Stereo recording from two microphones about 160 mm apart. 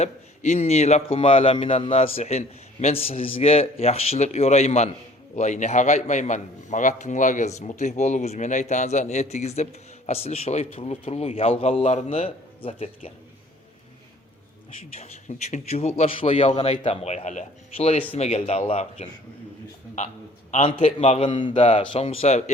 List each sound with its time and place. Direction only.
0.0 s a man's voice: 45° left (ahead or behind)
14.9 s a man's voice: 45° left (ahead or behind)
20.5 s speech: 35° left (ahead or behind)
21.2 s speech: 30° left (ahead or behind)